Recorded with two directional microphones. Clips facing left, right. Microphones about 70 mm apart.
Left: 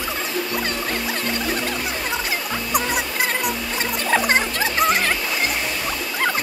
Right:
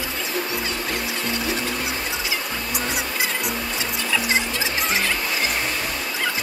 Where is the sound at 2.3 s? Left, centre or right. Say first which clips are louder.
Left 4 dB; left.